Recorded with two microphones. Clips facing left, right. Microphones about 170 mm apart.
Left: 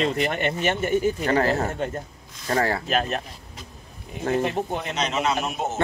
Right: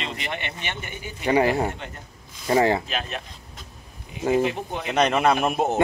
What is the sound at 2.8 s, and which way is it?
Speech, 40° left (ahead or behind).